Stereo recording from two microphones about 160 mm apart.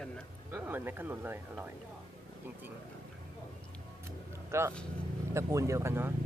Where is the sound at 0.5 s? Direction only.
10° right (ahead or behind).